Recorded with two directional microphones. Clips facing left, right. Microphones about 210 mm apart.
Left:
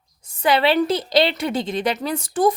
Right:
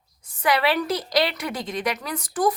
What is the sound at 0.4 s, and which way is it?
A woman's voice, 25° left (ahead or behind).